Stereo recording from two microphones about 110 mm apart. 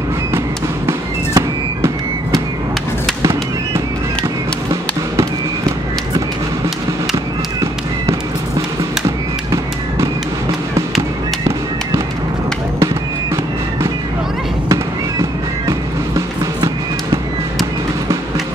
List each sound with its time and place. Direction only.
0.8 s music: 25° right (ahead or behind)
3.2 s fireworks: 25° right (ahead or behind)